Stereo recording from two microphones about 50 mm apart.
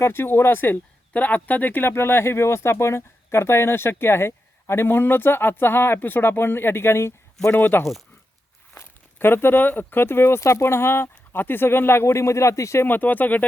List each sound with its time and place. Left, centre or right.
0.0 s speech: left
1.1 s speech: left
1.9 s speech: left
7.5 s speech: left
9.1 s speech: left
10.4 s speech: left
12.8 s speech: left